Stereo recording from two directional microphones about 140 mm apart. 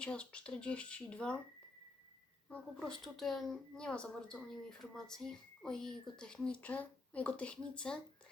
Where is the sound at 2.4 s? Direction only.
5° left (ahead or behind).